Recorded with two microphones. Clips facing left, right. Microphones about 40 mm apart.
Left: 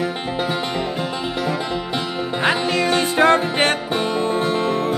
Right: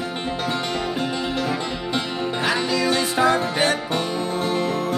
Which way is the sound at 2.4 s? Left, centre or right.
Left.